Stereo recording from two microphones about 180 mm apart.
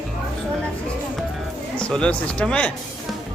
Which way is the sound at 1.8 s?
5° left (ahead or behind).